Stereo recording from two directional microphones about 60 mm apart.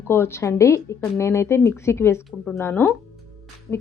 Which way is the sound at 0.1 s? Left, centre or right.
Left.